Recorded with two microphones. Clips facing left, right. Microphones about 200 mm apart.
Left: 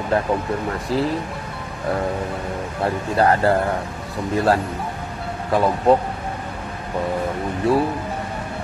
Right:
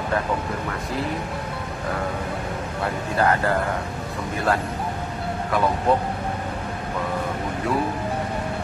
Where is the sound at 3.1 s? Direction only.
35° left (ahead or behind).